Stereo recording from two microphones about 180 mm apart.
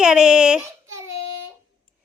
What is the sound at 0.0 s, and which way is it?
Speech, 5° right (ahead or behind).